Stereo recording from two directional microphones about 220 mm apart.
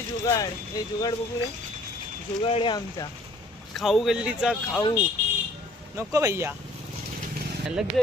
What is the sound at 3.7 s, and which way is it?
Speech, centre (ahead or behind).